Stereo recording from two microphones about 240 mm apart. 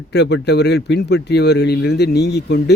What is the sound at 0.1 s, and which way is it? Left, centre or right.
A man's voice, left.